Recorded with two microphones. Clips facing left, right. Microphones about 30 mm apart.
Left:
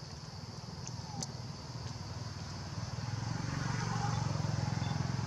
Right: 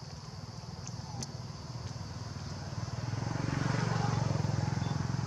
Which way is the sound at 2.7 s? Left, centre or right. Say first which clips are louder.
Right 3 dB; centre.